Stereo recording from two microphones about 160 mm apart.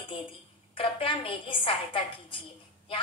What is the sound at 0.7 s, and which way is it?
A woman's voice, 35° left (ahead or behind).